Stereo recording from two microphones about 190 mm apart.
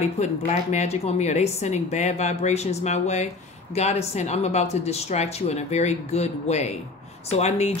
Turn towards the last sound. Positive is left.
turn(degrees=35)  # may be behind; listen again after turning